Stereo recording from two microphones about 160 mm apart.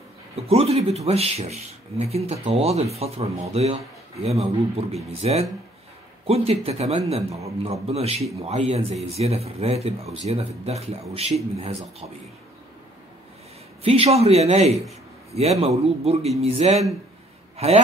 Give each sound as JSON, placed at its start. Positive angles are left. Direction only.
{"t": 0.4, "sound": "speech", "side_deg": -40}
{"t": 13.8, "sound": "a man's voice", "side_deg": -40}